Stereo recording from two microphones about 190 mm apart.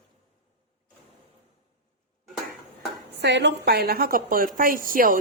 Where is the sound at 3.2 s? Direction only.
65° right (ahead or behind).